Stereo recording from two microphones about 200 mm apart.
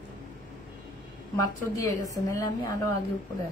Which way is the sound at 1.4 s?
15° left (ahead or behind).